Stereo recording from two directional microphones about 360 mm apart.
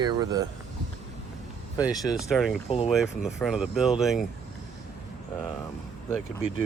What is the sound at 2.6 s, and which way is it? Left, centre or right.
Speech, centre.